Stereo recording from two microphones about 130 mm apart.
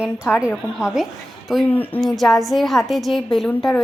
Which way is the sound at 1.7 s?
15° left (ahead or behind).